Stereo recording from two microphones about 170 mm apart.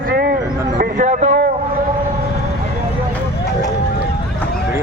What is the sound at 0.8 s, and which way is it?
Speech, 50° right (ahead or behind).